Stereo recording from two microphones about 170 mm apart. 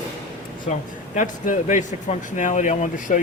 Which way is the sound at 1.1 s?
50° left (ahead or behind).